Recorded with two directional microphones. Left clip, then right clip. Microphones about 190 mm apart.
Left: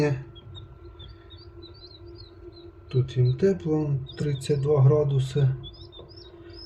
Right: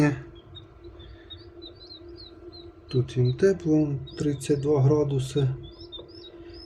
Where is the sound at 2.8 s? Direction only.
25° right (ahead or behind).